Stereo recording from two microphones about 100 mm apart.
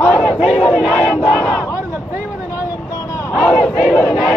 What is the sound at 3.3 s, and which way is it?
Battle cry, 10° left (ahead or behind).